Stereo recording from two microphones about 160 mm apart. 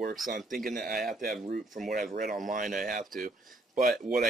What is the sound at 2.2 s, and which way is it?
Speech, 55° right (ahead or behind).